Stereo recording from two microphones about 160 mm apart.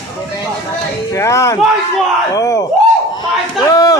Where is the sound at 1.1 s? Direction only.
15° left (ahead or behind).